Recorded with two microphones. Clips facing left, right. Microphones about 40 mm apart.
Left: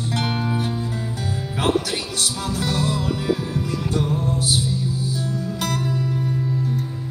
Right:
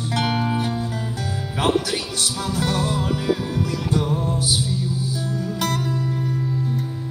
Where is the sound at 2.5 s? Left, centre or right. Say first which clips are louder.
Right 1 dB; right.